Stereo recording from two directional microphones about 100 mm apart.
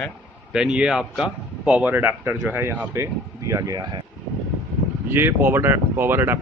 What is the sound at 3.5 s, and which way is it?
Speech, 35° right (ahead or behind).